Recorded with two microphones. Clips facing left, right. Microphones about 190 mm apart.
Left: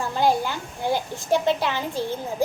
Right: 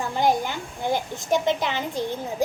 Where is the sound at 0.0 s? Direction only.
20° right (ahead or behind).